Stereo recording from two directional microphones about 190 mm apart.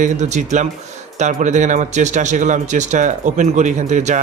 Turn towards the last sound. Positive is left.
turn(degrees=-40)  # may be behind; listen again after turning